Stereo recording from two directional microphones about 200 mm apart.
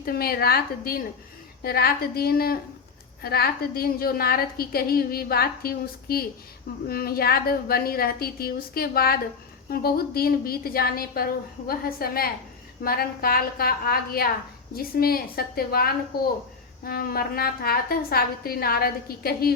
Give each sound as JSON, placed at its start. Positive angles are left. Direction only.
{"t": 0.0, "sound": "a woman's voice", "side_deg": 50}